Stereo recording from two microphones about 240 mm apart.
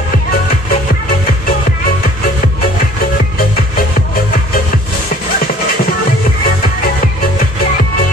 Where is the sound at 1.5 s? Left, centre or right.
Left.